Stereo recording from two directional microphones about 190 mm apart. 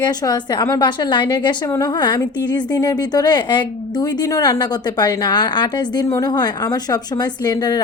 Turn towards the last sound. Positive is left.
turn(degrees=20)  # may be behind; listen again after turning